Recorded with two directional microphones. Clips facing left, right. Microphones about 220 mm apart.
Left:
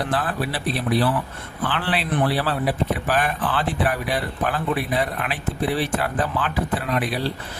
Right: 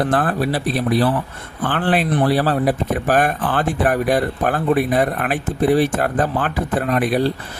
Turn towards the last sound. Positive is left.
turn(degrees=-50)  # may be behind; listen again after turning